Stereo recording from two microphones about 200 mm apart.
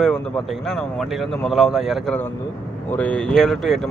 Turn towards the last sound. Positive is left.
turn(degrees=0)  # may be behind; listen again after turning